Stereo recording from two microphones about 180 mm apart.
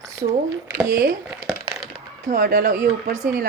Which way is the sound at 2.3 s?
50° right (ahead or behind).